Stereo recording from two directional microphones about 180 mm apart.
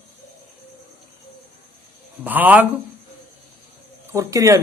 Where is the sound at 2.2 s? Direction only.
10° right (ahead or behind).